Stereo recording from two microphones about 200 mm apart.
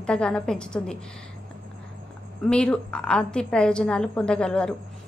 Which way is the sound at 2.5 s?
5° left (ahead or behind).